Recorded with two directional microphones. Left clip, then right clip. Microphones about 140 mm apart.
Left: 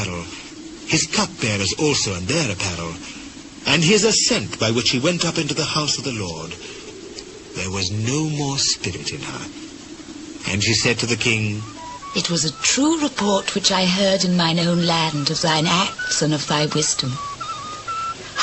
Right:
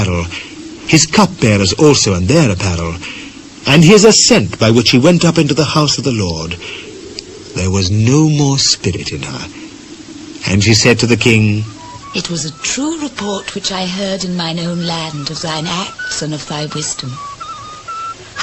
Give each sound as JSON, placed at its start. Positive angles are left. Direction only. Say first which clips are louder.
{"t": 0.9, "sound": "speech", "louder": "right 10 dB", "side_deg": 25}
{"t": 10.4, "sound": "speech", "louder": "right 8 dB", "side_deg": 25}